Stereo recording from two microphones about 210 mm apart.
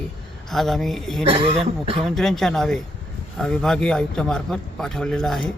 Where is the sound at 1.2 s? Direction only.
25° right (ahead or behind).